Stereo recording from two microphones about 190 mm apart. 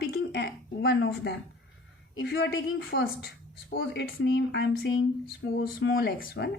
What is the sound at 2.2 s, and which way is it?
Speech, 55° left (ahead or behind).